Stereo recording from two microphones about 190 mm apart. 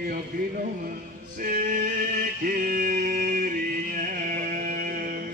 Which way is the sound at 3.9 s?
45° right (ahead or behind).